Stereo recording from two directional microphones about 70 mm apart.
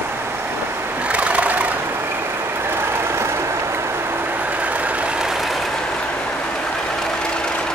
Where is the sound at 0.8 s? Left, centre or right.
Right.